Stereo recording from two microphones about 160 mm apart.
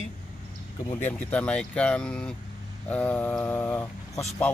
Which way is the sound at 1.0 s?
10° left (ahead or behind).